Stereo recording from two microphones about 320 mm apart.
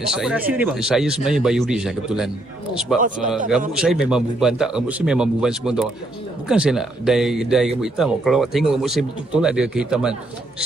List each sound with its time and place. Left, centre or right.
0.0 s speech: centre